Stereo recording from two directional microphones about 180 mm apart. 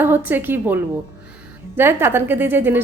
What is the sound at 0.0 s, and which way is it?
A woman's voice, 10° right (ahead or behind).